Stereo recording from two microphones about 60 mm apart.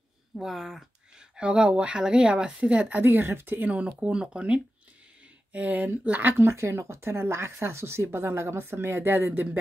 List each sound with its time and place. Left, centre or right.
0.4 s speech: centre; by 3.1 s right
3.1 s speech: right
6.3 s speech: right